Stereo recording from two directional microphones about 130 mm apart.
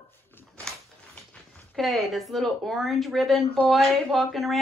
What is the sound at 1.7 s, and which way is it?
A woman's voice, centre (ahead or behind).